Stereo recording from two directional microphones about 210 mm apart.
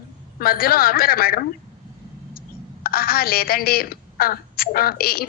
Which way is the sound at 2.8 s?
45° left (ahead or behind).